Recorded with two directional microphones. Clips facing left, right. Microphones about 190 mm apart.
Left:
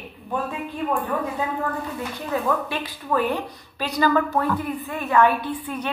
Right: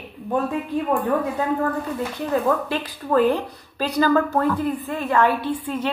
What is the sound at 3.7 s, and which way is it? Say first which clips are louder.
A woman's voice: right 2 dB; 35° right (ahead or behind).